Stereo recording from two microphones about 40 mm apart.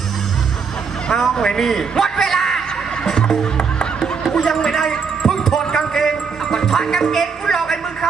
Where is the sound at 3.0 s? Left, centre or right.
Centre.